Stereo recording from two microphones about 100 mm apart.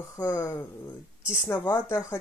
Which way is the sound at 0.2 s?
30° left (ahead or behind).